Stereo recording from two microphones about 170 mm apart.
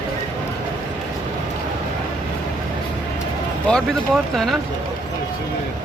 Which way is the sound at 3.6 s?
5° left (ahead or behind).